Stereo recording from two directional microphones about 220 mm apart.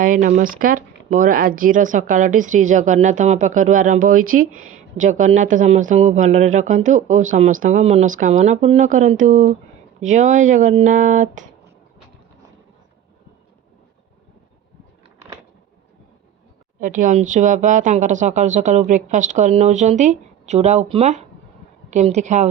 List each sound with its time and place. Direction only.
0.0 s speech: 35° right (ahead or behind)
16.8 s a woman's voice: 35° right (ahead or behind)